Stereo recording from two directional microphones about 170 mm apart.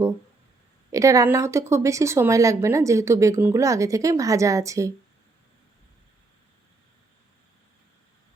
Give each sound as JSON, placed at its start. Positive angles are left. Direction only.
{"t": 0.9, "sound": "speech", "side_deg": -20}